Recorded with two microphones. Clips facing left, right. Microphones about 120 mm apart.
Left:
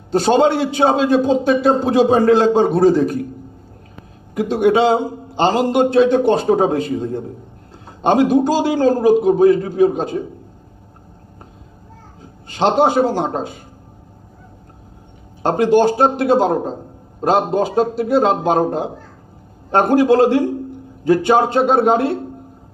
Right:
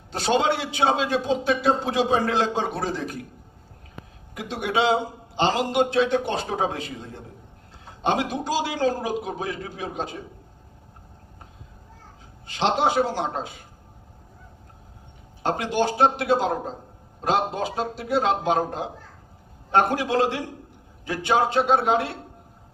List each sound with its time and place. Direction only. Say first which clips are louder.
0.1 s a man's voice: left 8 dB; 45° left (ahead or behind)
4.4 s a man's voice: left 10 dB; 45° left (ahead or behind)
12.5 s a man's voice: left 7 dB; 45° left (ahead or behind)
15.4 s a man's voice: left 10 dB; 45° left (ahead or behind)